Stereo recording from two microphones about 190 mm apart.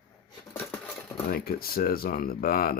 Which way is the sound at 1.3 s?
55° left (ahead or behind).